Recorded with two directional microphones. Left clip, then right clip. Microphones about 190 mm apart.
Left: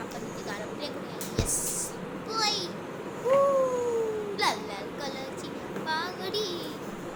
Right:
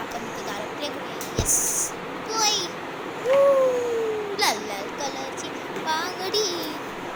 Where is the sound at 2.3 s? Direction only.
15° right (ahead or behind).